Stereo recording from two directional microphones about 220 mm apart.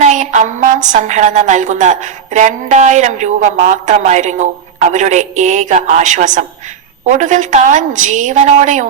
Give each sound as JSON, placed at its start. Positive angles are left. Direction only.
{"t": 0.0, "sound": "a woman's voice", "side_deg": -35}